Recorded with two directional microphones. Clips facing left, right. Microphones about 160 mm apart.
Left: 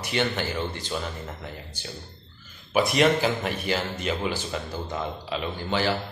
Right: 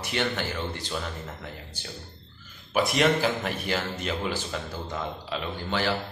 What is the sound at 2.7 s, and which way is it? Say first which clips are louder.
Speech: left 2 dB; 5° left (ahead or behind).